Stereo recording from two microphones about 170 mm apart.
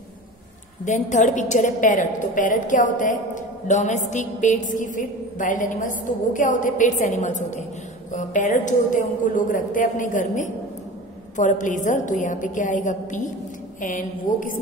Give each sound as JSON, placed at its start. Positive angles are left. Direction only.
{"t": 0.8, "sound": "a woman's voice", "side_deg": 45}